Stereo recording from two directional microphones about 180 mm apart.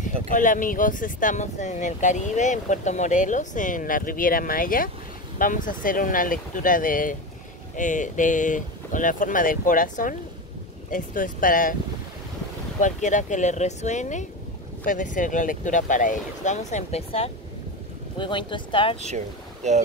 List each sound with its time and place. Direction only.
0.3 s speech: 45° left (ahead or behind)
12.8 s speech: 45° left (ahead or behind); by 18.9 s 30° left (ahead or behind)
18.9 s speech: 40° right (ahead or behind)